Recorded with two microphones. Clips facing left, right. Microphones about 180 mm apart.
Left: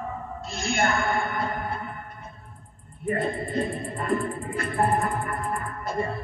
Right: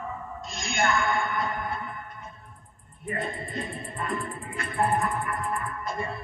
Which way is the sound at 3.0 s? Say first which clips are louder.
Left 6 dB; 35° left (ahead or behind).